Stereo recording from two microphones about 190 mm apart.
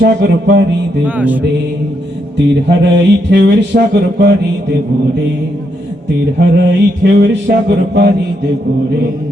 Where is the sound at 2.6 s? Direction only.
65° right (ahead or behind).